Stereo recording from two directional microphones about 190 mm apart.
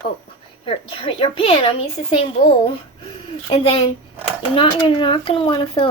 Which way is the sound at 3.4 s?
30° left (ahead or behind).